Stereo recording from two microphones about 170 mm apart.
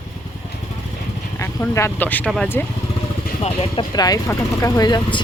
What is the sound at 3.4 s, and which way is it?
Speech, 40° left (ahead or behind).